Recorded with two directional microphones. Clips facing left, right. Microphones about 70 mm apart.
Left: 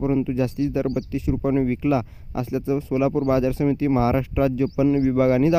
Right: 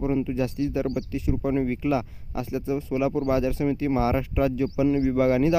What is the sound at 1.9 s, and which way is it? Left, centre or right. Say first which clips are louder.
Speech: left 3 dB; left.